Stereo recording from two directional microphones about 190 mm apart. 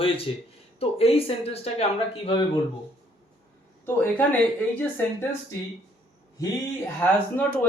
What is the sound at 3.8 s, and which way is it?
Speech, 10° left (ahead or behind).